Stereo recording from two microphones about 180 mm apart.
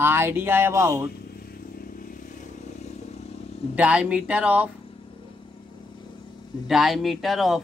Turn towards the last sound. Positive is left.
turn(degrees=0)  # may be behind; listen again after turning